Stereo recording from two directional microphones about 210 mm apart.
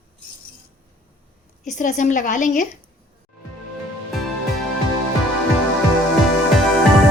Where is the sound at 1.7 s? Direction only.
35° left (ahead or behind).